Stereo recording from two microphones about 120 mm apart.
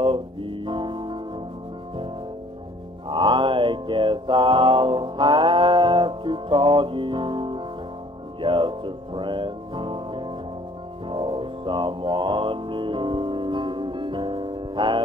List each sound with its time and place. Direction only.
0.0 s music: 45° right (ahead or behind)
3.1 s mantra: 45° right (ahead or behind)
8.4 s music: 45° right (ahead or behind)